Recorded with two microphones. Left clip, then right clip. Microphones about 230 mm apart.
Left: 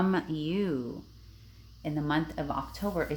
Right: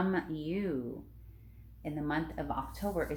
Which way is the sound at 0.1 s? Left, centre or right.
Left.